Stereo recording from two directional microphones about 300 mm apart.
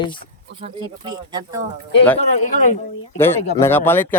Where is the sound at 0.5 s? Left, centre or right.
Centre.